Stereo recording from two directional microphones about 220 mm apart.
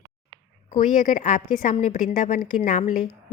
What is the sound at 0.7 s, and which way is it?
A woman's voice, 35° left (ahead or behind).